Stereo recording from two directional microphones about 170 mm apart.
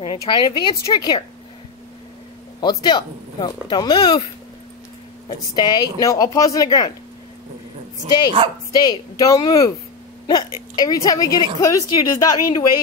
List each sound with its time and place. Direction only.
0.0 s speech: 25° left (ahead or behind)
2.6 s speech: 25° left (ahead or behind)
5.6 s speech: 25° left (ahead or behind)
8.0 s speech: 30° right (ahead or behind)
8.7 s speech: 20° left (ahead or behind)